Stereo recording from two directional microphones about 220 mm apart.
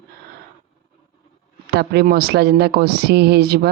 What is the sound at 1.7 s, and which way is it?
Speech, 45° right (ahead or behind).